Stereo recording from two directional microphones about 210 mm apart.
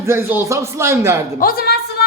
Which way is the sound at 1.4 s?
45° left (ahead or behind).